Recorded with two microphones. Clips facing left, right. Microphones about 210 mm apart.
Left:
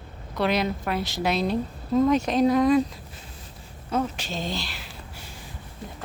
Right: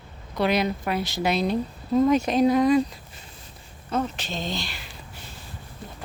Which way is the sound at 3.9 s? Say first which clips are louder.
Even; 10° left (ahead or behind).